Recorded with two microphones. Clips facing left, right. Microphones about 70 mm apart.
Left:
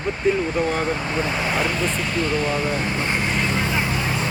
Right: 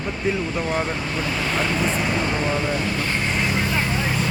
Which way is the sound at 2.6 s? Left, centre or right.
Left.